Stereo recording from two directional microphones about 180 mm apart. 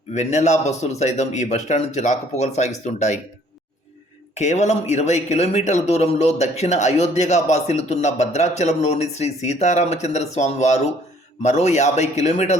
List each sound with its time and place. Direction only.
0.1 s speech: 40° left (ahead or behind)
4.4 s speech: 40° left (ahead or behind)